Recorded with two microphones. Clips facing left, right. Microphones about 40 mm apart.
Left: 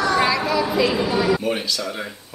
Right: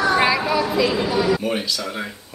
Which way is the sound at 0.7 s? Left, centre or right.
Centre.